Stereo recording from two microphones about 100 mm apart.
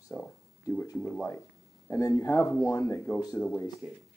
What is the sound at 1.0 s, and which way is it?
Speech, 20° left (ahead or behind).